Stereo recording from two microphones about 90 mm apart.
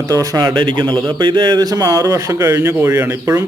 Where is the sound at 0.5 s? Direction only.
65° right (ahead or behind); by 3.4 s 30° right (ahead or behind).